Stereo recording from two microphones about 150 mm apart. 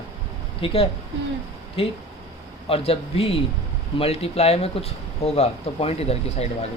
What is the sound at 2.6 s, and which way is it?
A man's voice, 40° left (ahead or behind).